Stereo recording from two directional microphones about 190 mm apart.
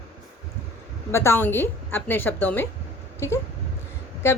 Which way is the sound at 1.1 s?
15° left (ahead or behind).